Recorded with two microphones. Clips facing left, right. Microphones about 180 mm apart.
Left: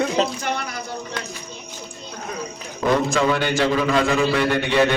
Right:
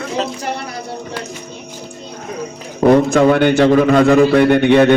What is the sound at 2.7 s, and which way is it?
A man's voice, 50° right (ahead or behind).